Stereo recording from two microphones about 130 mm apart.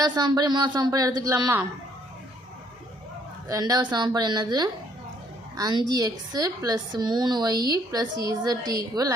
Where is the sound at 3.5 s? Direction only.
30° right (ahead or behind).